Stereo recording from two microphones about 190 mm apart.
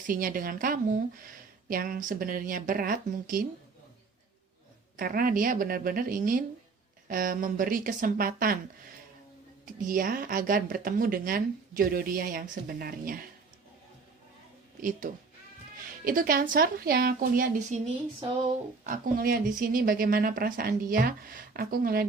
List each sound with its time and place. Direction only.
0.1 s speech: 45° right (ahead or behind)
4.9 s speech: 50° right (ahead or behind)
9.8 s speech: 45° right (ahead or behind)
14.8 s speech: 45° right (ahead or behind)
18.9 s speech: 45° right (ahead or behind)